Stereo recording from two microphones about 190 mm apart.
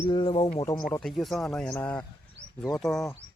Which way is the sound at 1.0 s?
Centre (ahead or behind).